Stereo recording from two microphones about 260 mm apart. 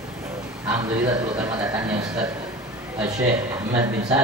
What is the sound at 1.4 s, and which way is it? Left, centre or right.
Speech, centre.